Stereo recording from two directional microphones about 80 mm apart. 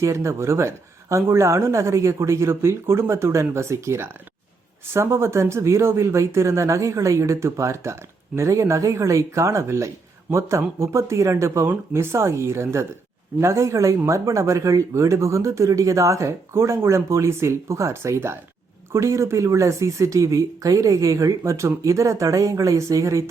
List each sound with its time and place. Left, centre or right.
0.0 s speech: right